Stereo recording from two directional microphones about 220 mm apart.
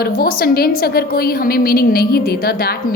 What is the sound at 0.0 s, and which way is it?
Speech, 45° left (ahead or behind).